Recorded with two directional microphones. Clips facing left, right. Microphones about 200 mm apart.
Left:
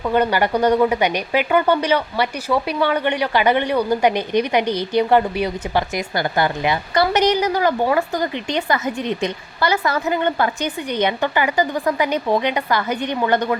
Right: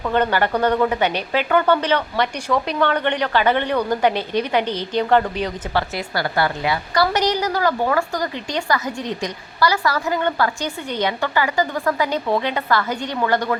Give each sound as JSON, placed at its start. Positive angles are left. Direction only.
{"t": 0.0, "sound": "speech", "side_deg": 10}